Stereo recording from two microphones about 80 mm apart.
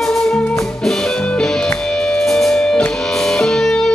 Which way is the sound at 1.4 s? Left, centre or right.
Centre.